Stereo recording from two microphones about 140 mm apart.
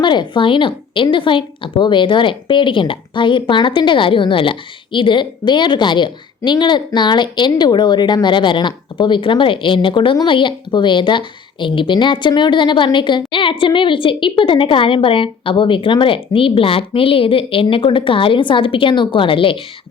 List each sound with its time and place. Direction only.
0.0 s a woman's voice: 35° left (ahead or behind)